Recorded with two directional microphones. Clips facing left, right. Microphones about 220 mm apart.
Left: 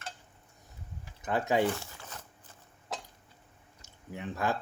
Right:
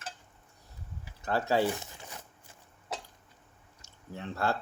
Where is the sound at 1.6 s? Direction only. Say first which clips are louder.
Left 1 dB; 20° right (ahead or behind).